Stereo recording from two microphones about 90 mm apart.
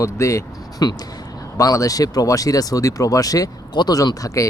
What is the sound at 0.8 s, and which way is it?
Speech, 45° left (ahead or behind).